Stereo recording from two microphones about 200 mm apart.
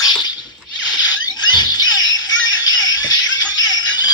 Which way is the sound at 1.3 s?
20° left (ahead or behind).